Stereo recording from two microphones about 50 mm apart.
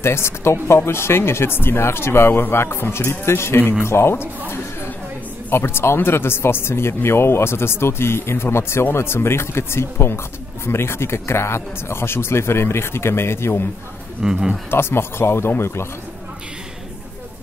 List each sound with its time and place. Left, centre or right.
0.0 s speech: left
5.5 s speech: left
14.2 s speech: centre
14.7 s speech: left